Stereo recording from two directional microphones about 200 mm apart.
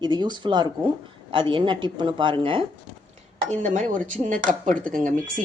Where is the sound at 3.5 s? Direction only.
35° right (ahead or behind).